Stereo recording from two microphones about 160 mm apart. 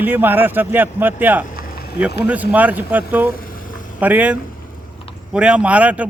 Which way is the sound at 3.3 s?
65° left (ahead or behind).